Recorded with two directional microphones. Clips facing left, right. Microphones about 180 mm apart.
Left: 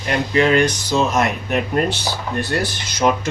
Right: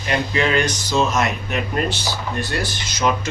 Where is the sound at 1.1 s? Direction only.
55° left (ahead or behind).